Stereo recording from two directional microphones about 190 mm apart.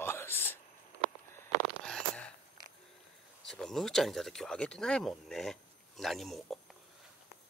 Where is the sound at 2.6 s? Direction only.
20° right (ahead or behind).